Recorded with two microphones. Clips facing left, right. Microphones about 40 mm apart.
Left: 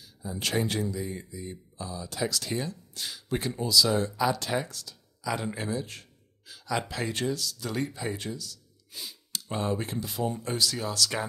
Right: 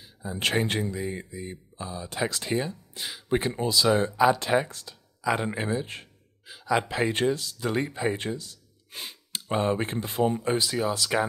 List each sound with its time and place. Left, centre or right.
0.0 s speech: right